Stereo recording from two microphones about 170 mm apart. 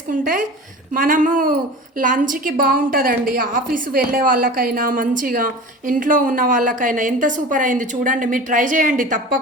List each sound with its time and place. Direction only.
0.1 s a woman's voice: 50° right (ahead or behind)